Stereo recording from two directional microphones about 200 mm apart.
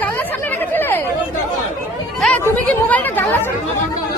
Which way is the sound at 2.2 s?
10° left (ahead or behind).